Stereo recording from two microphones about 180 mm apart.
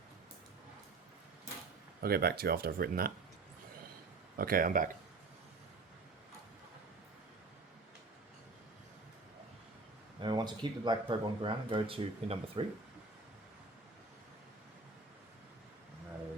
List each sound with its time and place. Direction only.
2.0 s speech: 60° right (ahead or behind)
4.4 s speech: 55° right (ahead or behind)
10.2 s speech: 25° right (ahead or behind)